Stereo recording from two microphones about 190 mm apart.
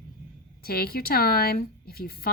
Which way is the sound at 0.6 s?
55° left (ahead or behind).